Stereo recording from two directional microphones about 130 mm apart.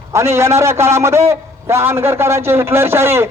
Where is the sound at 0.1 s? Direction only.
20° right (ahead or behind).